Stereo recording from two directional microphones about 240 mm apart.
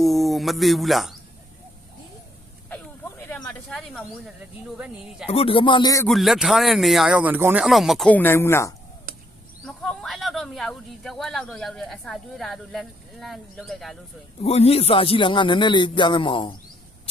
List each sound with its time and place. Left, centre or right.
0.0 s speech: centre
2.6 s snake: centre
4.8 s speech: centre
5.3 s a man's voice: left
6.1 s speech: centre
14.4 s a man's voice: left